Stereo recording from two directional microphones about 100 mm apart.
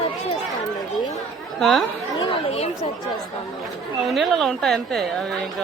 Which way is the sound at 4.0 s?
Centre (ahead or behind).